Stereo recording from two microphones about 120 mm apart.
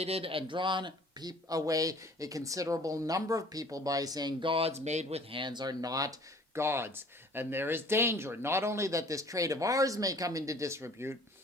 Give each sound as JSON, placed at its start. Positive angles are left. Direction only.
{"t": 0.0, "sound": "speech", "side_deg": -55}
{"t": 5.4, "sound": "speech", "side_deg": -40}